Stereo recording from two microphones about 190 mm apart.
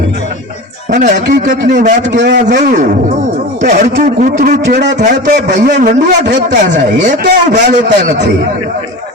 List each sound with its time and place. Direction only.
0.9 s a man's voice: 40° right (ahead or behind)
2.1 s a man's voice: 65° right (ahead or behind)
2.6 s a man's voice: 40° right (ahead or behind)
4.7 s a man's voice: 65° right (ahead or behind)
4.9 s a man's voice: 40° right (ahead or behind)